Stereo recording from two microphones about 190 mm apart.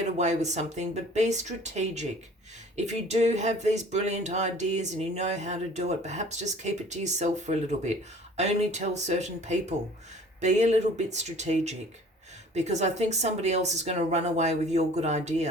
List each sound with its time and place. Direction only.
0.2 s speech: 35° right (ahead or behind)